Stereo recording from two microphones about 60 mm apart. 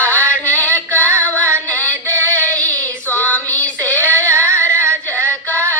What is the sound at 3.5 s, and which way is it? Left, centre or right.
Child singing, left.